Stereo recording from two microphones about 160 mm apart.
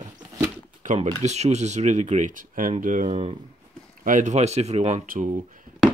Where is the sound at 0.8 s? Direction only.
50° right (ahead or behind).